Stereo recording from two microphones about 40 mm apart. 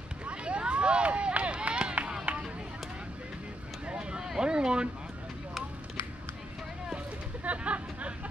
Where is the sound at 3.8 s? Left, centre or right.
Right.